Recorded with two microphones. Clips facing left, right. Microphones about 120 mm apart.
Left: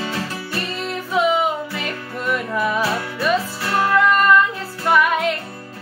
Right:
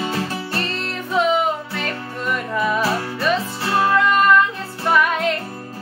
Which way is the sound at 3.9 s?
Centre (ahead or behind).